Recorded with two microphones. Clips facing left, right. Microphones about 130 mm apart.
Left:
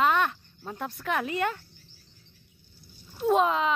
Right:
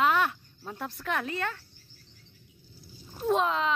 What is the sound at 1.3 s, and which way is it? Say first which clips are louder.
Speech: left 5 dB; 15° left (ahead or behind).